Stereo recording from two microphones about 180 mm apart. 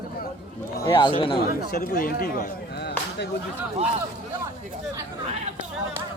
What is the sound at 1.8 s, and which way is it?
Speech, 55° left (ahead or behind).